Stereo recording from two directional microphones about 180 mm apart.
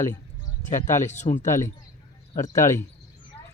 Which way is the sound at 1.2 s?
45° left (ahead or behind).